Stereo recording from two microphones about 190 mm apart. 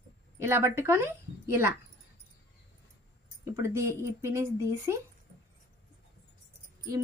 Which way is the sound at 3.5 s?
15° right (ahead or behind).